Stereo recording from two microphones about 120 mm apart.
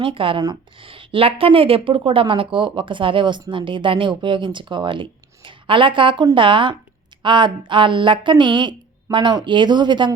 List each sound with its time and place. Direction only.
0.0 s a woman's voice: 45° right (ahead or behind)